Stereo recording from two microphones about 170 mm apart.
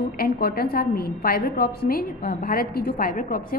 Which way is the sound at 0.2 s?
65° left (ahead or behind).